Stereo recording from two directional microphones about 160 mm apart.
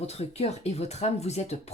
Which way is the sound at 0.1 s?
40° left (ahead or behind).